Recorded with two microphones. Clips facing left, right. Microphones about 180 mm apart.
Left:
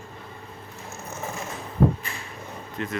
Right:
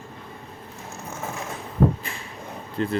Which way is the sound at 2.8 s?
35° right (ahead or behind).